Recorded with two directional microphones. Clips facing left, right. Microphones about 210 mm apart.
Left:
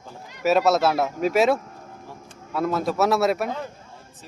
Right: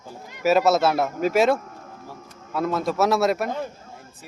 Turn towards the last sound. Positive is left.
turn(degrees=0)  # may be behind; listen again after turning